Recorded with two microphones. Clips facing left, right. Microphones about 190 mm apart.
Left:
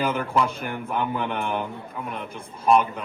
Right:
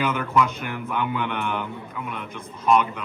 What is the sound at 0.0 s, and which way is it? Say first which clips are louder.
Speech: right 1 dB; 30° left (ahead or behind).